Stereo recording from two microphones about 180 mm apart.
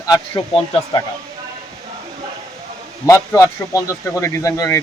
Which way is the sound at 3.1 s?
20° left (ahead or behind).